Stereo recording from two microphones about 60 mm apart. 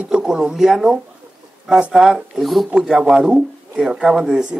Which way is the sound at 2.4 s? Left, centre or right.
Centre.